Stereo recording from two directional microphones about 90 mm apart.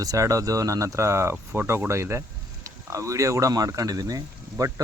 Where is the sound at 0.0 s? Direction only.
40° right (ahead or behind).